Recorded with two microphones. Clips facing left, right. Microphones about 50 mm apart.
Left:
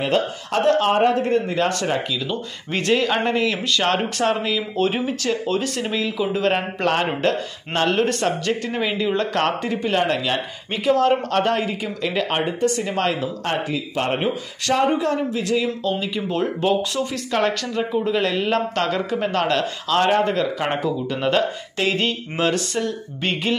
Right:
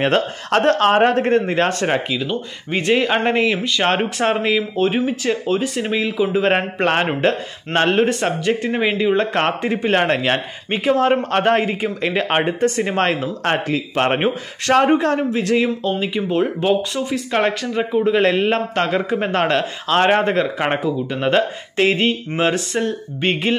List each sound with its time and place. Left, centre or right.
0.0 s a man's voice: right
1.7 s speech: right
2.1 s speech: centre
4.7 s speech: centre
6.4 s speech: right
7.1 s a man's voice: right
15.8 s speech: right
18.2 s speech: right
20.8 s speech: centre
21.3 s speech: right